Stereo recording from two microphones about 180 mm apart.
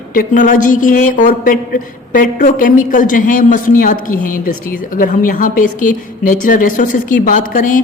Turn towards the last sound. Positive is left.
turn(degrees=45)  # may be behind; listen again after turning